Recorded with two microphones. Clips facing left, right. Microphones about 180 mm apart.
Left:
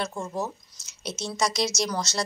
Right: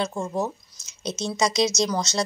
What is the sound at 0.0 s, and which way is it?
Speech, 25° right (ahead or behind).